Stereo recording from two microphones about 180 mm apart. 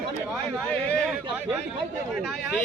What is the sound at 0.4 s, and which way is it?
Speech, 5° left (ahead or behind).